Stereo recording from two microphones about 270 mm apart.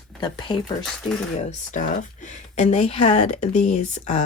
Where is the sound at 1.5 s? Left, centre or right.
Left.